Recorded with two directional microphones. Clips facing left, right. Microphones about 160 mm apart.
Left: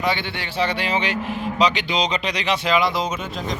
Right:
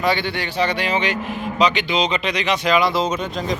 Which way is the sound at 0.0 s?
20° left (ahead or behind).